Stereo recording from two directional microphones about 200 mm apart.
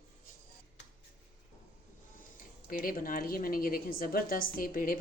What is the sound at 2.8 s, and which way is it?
Speech, 45° left (ahead or behind).